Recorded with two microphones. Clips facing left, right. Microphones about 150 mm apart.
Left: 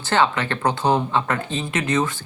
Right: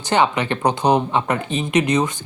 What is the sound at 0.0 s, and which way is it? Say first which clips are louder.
Speech: right 2 dB; 15° right (ahead or behind).